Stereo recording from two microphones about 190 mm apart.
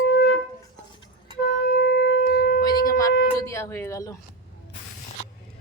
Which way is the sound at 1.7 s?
55° left (ahead or behind).